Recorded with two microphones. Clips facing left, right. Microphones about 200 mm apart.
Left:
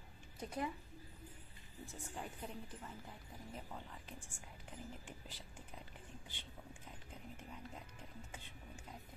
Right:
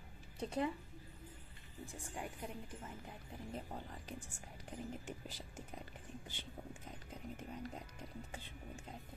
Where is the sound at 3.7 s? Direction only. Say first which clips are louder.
Right 4 dB; 40° right (ahead or behind).